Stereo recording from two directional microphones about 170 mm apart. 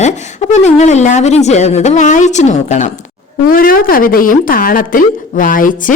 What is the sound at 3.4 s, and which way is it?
Speech, 60° left (ahead or behind).